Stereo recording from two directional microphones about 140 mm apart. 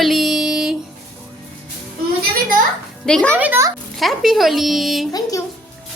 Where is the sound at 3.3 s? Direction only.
15° right (ahead or behind).